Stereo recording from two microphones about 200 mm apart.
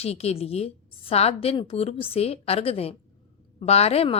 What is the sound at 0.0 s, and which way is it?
A woman's voice, 30° left (ahead or behind).